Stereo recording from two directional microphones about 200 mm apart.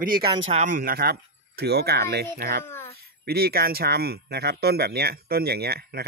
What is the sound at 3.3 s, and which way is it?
Speech, 50° right (ahead or behind).